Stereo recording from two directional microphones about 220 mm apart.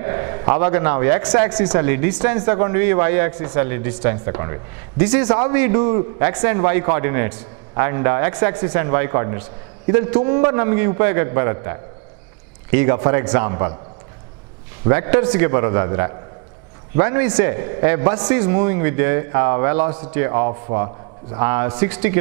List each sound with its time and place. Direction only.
0.0 s a man's voice: 20° right (ahead or behind)
14.9 s a man's voice: 10° right (ahead or behind)